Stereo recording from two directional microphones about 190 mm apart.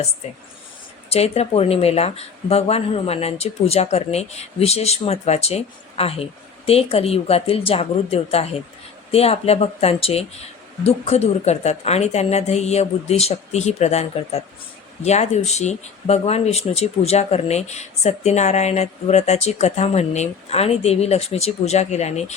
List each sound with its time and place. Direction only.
1.1 s speech: 35° left (ahead or behind)